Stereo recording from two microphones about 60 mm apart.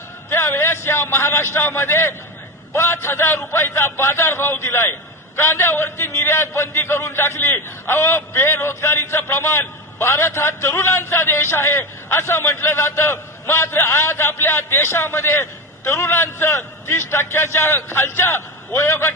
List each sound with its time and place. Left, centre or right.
0.3 s a man's voice: left